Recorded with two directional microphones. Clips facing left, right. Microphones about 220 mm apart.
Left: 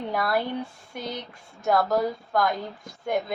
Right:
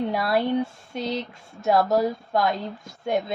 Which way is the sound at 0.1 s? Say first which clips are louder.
Right 4 dB; 25° right (ahead or behind).